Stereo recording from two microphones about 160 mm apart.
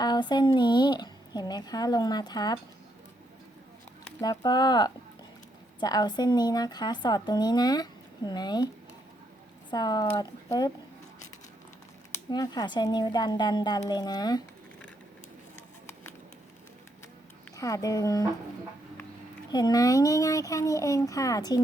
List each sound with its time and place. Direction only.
0.0 s speech: 25° left (ahead or behind)
4.2 s speech: 25° left (ahead or behind)
12.3 s speech: 25° left (ahead or behind)
17.6 s speech: 20° left (ahead or behind)
19.5 s speech: 25° left (ahead or behind)